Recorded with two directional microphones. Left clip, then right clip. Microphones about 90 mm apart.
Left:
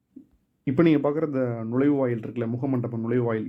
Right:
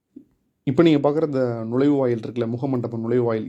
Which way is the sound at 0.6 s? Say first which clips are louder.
Right 4 dB; 35° right (ahead or behind).